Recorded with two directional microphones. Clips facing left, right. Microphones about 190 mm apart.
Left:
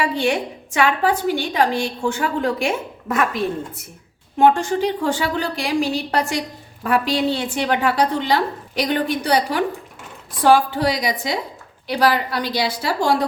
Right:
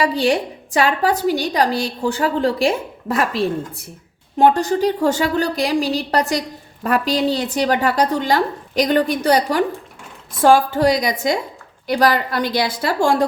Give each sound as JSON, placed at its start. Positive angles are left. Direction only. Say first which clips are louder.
{"t": 0.0, "sound": "a woman's voice", "louder": "right 3 dB", "side_deg": -35}